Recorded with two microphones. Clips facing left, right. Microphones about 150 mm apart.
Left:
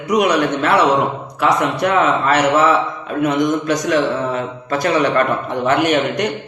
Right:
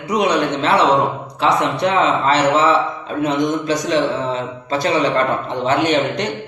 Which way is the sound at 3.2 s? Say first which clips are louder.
Left 2 dB; 25° right (ahead or behind).